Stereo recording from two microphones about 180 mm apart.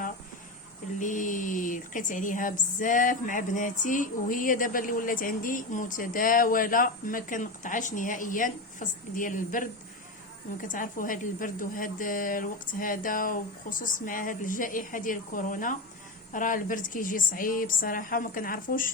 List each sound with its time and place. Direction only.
0.9 s a woman's voice: 45° left (ahead or behind)
10.7 s a woman's voice: 50° left (ahead or behind)